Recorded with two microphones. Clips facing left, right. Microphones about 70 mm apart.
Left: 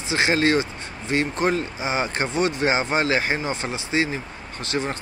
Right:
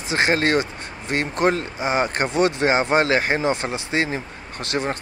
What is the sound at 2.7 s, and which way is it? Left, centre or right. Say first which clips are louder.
Speech: right 3 dB; right.